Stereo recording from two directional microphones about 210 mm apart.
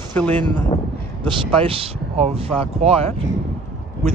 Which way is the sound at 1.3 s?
25° right (ahead or behind).